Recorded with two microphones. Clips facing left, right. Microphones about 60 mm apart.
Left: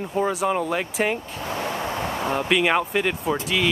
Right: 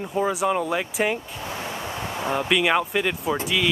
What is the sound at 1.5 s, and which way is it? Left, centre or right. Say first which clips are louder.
Vehicle: left 5 dB; left.